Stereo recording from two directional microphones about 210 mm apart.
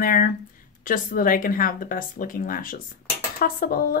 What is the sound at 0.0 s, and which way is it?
A woman's voice, 40° left (ahead or behind).